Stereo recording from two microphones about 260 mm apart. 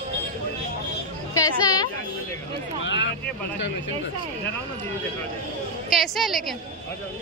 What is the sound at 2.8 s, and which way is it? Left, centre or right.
Speech, left.